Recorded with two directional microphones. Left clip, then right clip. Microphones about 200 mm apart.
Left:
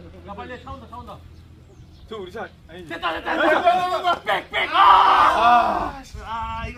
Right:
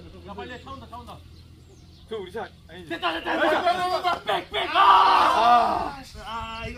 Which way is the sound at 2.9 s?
25° left (ahead or behind).